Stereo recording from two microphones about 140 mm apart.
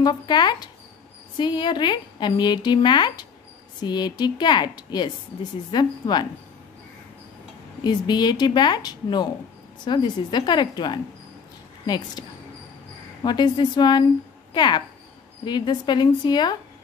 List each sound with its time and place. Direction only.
0.0 s speech: 30° left (ahead or behind)
7.8 s speech: 30° left (ahead or behind)